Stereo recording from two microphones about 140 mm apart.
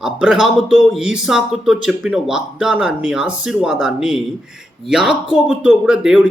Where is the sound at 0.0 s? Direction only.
5° right (ahead or behind).